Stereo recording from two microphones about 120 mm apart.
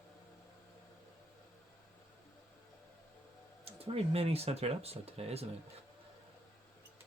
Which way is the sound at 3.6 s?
55° right (ahead or behind).